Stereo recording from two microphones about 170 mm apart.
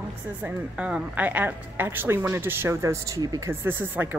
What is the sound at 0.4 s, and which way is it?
A woman's voice, 5° right (ahead or behind).